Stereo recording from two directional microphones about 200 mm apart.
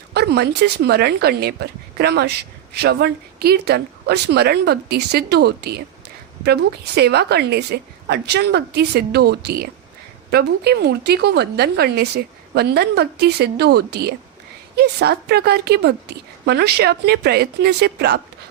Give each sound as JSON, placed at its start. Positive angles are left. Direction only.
{"t": 0.1, "sound": "a woman's voice", "side_deg": -55}